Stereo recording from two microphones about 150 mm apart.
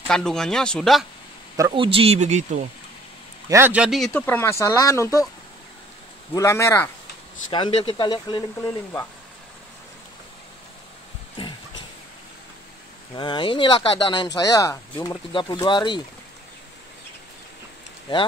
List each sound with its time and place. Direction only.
0.1 s speech: 5° left (ahead or behind)
1.7 s speech: 35° right (ahead or behind); by 2.6 s 50° right (ahead or behind)
3.4 s a man's voice: 15° right (ahead or behind)
4.1 s speech: 15° left (ahead or behind)
6.3 s speech: 20° left (ahead or behind)
7.5 s speech: 35° left (ahead or behind)
13.1 s speech: 35° left (ahead or behind)